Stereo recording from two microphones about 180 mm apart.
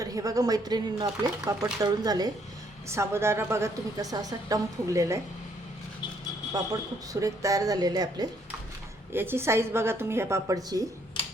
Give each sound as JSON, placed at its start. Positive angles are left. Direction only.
{"t": 0.0, "sound": "a woman's voice", "side_deg": -20}
{"t": 7.1, "sound": "a woman's voice", "side_deg": -20}